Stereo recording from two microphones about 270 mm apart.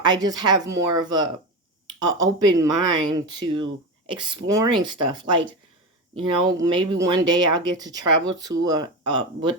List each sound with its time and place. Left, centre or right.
0.0 s speech: centre